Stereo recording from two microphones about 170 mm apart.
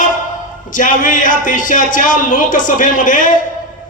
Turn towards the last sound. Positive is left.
turn(degrees=50)  # may be behind; listen again after turning